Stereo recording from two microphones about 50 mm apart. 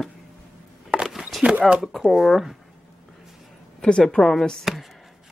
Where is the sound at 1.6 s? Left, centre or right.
Centre.